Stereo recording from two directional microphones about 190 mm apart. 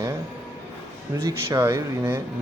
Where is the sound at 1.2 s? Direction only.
15° right (ahead or behind).